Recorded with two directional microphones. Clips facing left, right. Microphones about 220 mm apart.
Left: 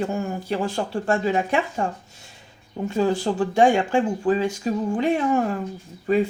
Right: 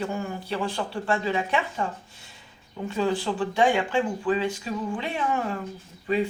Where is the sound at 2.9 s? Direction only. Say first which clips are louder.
Left 4 dB; 45° left (ahead or behind).